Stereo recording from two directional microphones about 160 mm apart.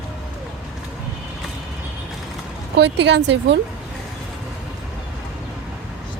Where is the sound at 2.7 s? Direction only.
90° right.